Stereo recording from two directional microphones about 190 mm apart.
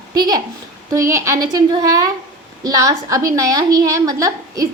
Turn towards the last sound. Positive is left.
turn(degrees=-15)  # may be behind; listen again after turning